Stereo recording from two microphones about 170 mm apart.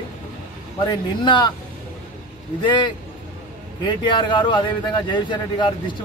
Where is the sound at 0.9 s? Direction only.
25° left (ahead or behind).